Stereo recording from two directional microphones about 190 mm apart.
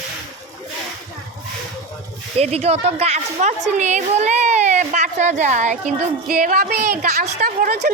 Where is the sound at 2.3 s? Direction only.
35° right (ahead or behind).